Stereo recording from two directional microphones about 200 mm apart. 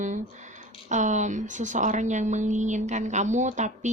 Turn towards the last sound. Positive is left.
turn(degrees=-35)  # may be behind; listen again after turning